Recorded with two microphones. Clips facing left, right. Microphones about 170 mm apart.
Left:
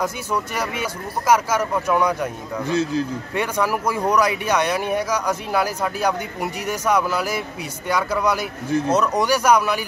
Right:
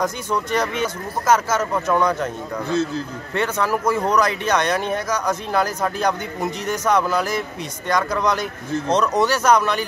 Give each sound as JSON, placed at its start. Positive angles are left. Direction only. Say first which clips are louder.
{"t": 0.0, "sound": "speech", "louder": "right 1 dB", "side_deg": 10}
{"t": 3.3, "sound": "speech", "louder": "right 1 dB", "side_deg": 10}